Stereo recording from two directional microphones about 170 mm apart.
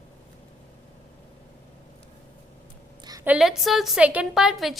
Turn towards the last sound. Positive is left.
turn(degrees=0)  # may be behind; listen again after turning